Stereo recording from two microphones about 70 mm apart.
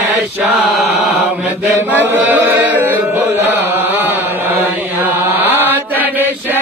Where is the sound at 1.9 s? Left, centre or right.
Right.